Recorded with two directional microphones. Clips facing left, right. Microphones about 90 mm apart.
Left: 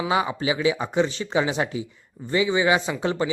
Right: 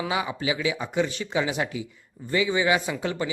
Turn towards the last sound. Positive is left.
turn(degrees=30)  # may be behind; listen again after turning